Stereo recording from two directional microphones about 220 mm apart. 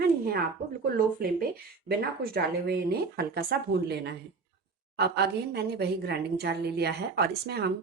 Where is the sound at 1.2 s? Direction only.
45° right (ahead or behind).